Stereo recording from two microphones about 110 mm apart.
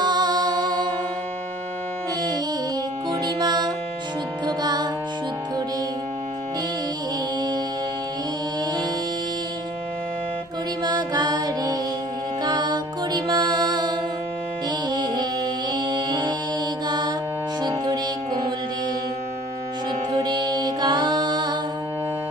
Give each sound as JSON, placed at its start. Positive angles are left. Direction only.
{"t": 0.0, "sound": "music", "side_deg": -40}
{"t": 3.3, "sound": "music", "side_deg": -40}
{"t": 10.8, "sound": "music", "side_deg": -40}
{"t": 16.8, "sound": "mantra", "side_deg": -40}
{"t": 20.1, "sound": "music", "side_deg": -40}